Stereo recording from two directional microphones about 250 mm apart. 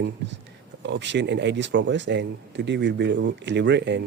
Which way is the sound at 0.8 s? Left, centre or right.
Right.